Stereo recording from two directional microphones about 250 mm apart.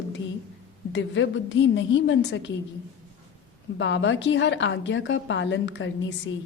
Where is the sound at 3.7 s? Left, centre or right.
Left.